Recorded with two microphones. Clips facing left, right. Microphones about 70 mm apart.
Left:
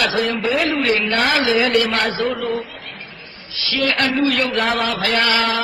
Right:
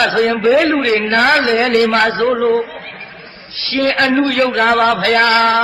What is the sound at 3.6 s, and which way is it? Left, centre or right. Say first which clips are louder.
A man's voice: right 5 dB; right.